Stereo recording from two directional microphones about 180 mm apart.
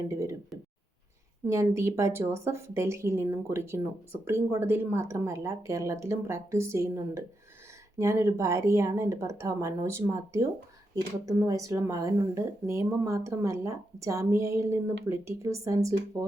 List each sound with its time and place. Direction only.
0.1 s speech: 15° right (ahead or behind)
1.5 s speech: 15° right (ahead or behind)